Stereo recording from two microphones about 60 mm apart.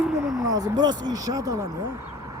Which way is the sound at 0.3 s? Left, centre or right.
Right.